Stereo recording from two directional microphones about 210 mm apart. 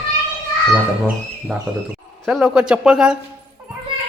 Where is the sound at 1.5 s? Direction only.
Centre (ahead or behind).